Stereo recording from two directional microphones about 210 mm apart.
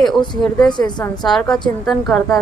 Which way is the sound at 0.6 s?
20° left (ahead or behind).